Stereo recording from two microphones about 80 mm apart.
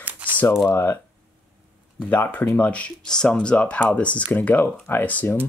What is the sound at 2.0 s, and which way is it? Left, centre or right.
Speech, centre.